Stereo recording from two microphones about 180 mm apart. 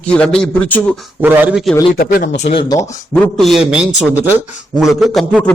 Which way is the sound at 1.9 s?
55° left (ahead or behind).